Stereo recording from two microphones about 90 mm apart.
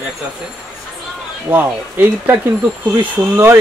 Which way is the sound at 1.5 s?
20° right (ahead or behind).